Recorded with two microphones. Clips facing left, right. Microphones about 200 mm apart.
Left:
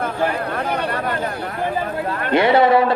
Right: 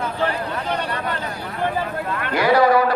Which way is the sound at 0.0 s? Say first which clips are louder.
Left 2 dB; 50° left (ahead or behind).